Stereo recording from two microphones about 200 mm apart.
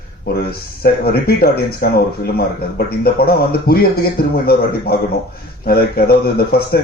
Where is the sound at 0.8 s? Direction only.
50° left (ahead or behind).